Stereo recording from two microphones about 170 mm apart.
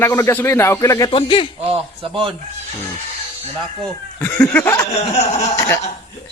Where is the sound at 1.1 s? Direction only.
35° left (ahead or behind).